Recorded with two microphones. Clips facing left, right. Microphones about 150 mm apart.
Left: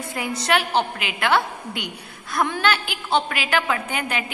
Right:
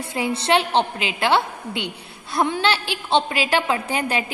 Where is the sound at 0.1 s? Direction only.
30° right (ahead or behind).